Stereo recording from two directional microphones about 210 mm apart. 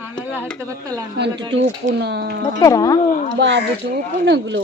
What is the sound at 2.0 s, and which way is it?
Speech, 55° right (ahead or behind).